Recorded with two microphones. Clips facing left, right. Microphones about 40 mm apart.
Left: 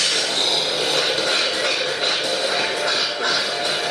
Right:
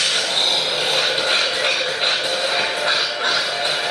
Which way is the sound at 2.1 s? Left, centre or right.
Centre.